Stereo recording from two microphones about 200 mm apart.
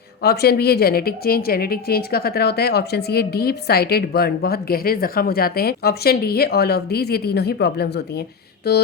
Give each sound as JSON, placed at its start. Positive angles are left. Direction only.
{"t": 0.2, "sound": "a woman's voice", "side_deg": 50}